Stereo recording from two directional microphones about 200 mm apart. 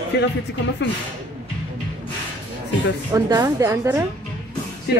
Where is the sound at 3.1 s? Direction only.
15° right (ahead or behind).